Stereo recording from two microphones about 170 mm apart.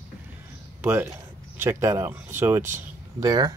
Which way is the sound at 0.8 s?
10° right (ahead or behind).